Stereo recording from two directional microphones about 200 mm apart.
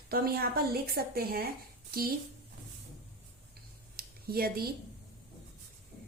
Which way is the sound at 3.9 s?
50° right (ahead or behind).